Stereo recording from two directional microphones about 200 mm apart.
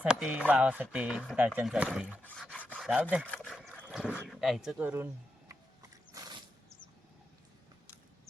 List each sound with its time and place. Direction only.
0.0 s speech: 5° right (ahead or behind)
2.2 s rub: 5° left (ahead or behind)
3.3 s boat: 5° left (ahead or behind)
4.4 s speech: centre (ahead or behind)
6.2 s mechanisms: 15° right (ahead or behind)